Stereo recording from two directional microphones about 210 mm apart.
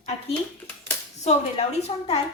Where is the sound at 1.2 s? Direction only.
30° left (ahead or behind).